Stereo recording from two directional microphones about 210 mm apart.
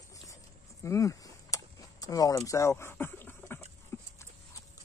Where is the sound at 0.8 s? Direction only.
15° left (ahead or behind).